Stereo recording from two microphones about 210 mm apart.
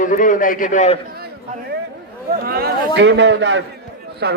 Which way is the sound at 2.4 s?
45° right (ahead or behind).